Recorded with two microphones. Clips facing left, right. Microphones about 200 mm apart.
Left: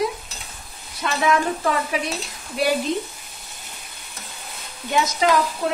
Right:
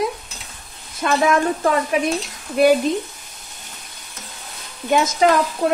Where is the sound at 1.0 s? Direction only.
45° right (ahead or behind).